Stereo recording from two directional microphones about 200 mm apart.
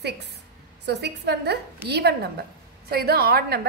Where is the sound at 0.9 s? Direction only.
55° right (ahead or behind).